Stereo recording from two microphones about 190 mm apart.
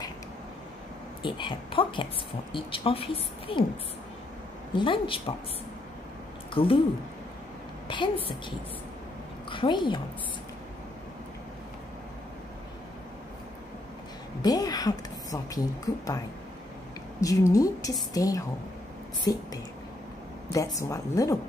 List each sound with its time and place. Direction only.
1.2 s a woman's voice: 25° left (ahead or behind)
4.7 s a woman's voice: 25° left (ahead or behind)
6.5 s speech: 30° left (ahead or behind)
7.9 s a woman's voice: 25° left (ahead or behind)
14.4 s a woman's voice: 20° left (ahead or behind)
17.2 s a woman's voice: 15° left (ahead or behind)
20.5 s a woman's voice: 15° left (ahead or behind)